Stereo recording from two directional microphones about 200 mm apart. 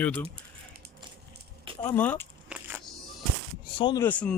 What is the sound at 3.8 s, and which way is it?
Speech, 20° left (ahead or behind).